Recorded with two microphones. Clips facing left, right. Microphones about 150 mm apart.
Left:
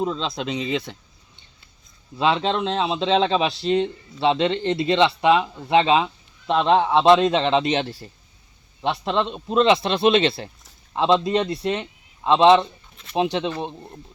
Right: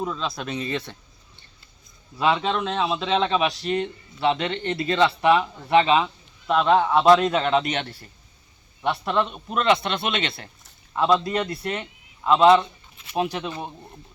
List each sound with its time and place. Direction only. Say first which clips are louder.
0.0 s a man's voice: left 3 dB; 25° left (ahead or behind)
2.1 s a man's voice: left 1 dB; 25° left (ahead or behind)